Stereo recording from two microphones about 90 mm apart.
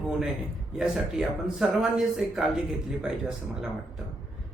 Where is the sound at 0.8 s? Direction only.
5° right (ahead or behind).